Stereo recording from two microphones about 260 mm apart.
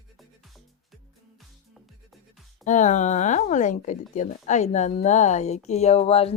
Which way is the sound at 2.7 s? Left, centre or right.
Left.